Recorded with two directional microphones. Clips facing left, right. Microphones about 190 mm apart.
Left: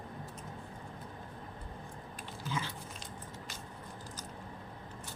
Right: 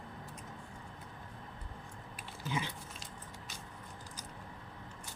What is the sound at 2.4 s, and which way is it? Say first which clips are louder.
Dog: right 1 dB; 15° right (ahead or behind).